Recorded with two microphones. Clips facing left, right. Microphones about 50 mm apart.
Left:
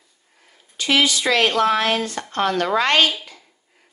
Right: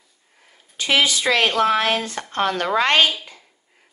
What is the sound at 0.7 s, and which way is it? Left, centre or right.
Speech, right.